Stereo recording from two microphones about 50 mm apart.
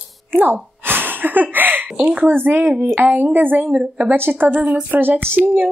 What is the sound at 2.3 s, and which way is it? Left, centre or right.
Speech, right.